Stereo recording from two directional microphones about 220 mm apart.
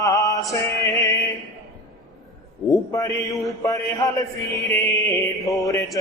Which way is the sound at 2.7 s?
15° left (ahead or behind).